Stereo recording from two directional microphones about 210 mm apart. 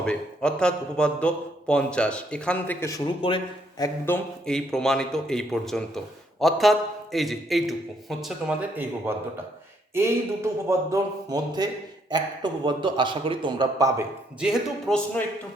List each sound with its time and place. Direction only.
0.0 s a man's voice: 5° left (ahead or behind)
3.2 s a man's voice: 25° left (ahead or behind); by 14.0 s 15° right (ahead or behind)
14.4 s a man's voice: centre (ahead or behind)